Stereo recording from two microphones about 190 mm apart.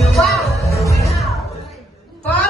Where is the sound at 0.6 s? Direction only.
15° left (ahead or behind).